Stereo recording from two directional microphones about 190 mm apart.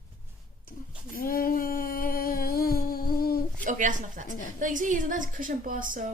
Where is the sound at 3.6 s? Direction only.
40° right (ahead or behind).